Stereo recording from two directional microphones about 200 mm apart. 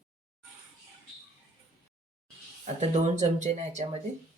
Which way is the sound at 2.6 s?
35° right (ahead or behind).